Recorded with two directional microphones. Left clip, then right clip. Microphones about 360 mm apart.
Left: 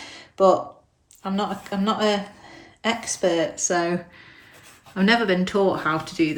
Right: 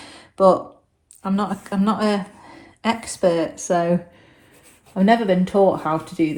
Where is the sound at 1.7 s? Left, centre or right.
Centre.